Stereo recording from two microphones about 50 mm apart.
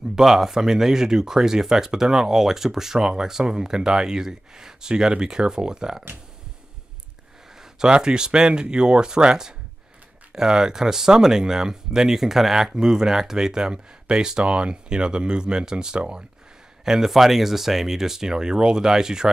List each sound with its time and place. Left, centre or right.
0.1 s speech: centre
7.8 s speech: centre